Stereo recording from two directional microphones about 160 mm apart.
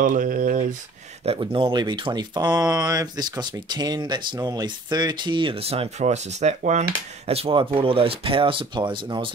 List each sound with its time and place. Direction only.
0.0 s speech: 55° right (ahead or behind)
1.2 s speech: 35° right (ahead or behind)